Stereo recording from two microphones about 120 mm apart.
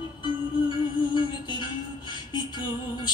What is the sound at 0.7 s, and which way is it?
Music, 40° left (ahead or behind).